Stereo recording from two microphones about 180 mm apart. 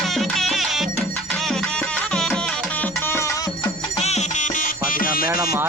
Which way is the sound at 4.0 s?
40° left (ahead or behind).